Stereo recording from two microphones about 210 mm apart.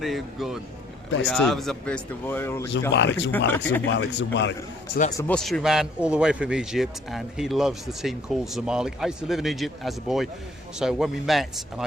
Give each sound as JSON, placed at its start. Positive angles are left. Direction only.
{"t": 0.0, "sound": "a man's voice", "side_deg": 0}
{"t": 2.9, "sound": "speech", "side_deg": 60}
{"t": 3.3, "sound": "speech", "side_deg": 10}
{"t": 3.9, "sound": "speech", "side_deg": 60}
{"t": 5.3, "sound": "a man's voice", "side_deg": 5}